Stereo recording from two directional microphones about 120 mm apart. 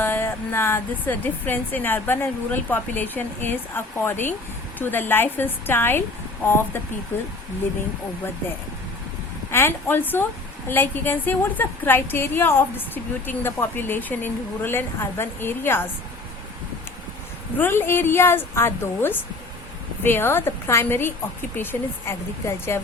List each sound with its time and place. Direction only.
0.0 s a woman's voice: 15° left (ahead or behind)
9.5 s a woman's voice: 20° left (ahead or behind)
17.6 s a woman's voice: 20° left (ahead or behind)